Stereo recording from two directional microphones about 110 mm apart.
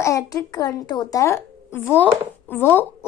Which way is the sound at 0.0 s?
30° left (ahead or behind).